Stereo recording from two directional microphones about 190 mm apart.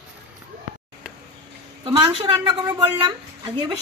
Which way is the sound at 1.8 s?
30° right (ahead or behind).